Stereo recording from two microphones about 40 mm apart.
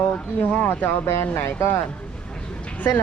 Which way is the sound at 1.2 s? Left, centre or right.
Left.